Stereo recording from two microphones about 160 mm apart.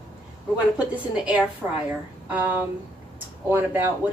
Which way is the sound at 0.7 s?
10° right (ahead or behind).